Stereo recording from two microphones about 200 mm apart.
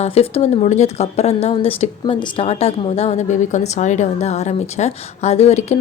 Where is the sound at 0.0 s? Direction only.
30° left (ahead or behind).